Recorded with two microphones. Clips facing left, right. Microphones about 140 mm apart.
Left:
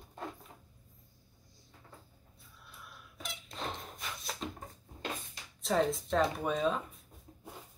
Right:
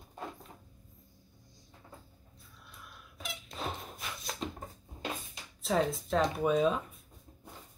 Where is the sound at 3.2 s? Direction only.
Centre (ahead or behind).